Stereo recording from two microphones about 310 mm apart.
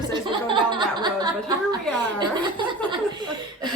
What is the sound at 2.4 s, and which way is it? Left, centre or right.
Speech, centre.